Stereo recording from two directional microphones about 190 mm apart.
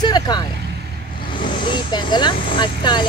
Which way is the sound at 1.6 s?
25° left (ahead or behind).